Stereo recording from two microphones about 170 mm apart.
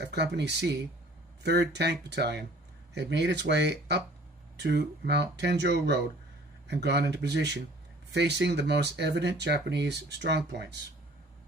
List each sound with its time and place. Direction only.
0.0 s speech: 75° right (ahead or behind)